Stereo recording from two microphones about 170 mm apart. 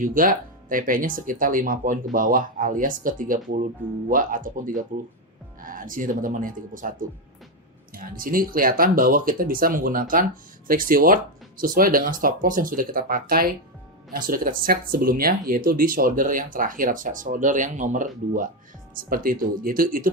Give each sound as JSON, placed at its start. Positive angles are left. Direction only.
{"t": 0.0, "sound": "speech", "side_deg": -50}
{"t": 8.2, "sound": "speech", "side_deg": -55}